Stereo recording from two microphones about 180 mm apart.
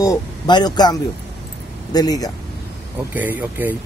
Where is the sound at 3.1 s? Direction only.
10° right (ahead or behind).